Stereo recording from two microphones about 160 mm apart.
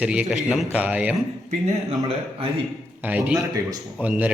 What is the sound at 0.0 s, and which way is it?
A man's voice, 5° right (ahead or behind).